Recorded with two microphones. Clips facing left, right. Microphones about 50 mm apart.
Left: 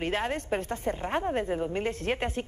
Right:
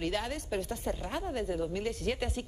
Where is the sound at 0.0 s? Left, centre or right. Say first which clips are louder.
Left 4 dB; left.